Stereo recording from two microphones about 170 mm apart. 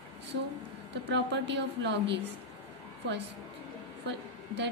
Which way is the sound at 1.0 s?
90° right.